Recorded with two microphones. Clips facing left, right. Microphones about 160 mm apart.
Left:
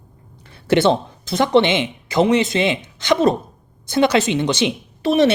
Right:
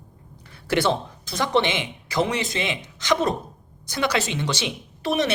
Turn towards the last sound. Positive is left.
turn(degrees=25)  # may be behind; listen again after turning